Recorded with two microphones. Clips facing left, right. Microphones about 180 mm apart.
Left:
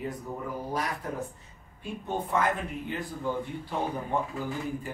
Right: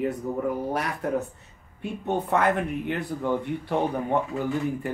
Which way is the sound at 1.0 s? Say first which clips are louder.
Right 8 dB; 65° right (ahead or behind).